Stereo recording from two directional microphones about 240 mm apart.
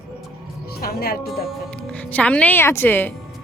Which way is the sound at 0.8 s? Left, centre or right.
Left.